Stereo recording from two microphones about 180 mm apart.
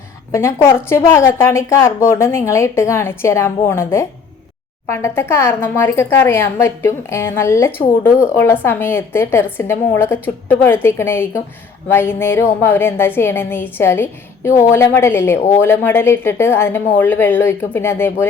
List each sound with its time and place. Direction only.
0.3 s a woman's voice: 15° left (ahead or behind)